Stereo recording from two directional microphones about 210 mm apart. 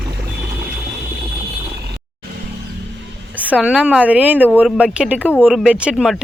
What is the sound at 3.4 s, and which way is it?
A woman's voice, 5° right (ahead or behind).